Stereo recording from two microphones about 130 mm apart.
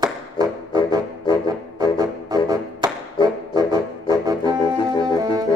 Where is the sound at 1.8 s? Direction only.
30° right (ahead or behind).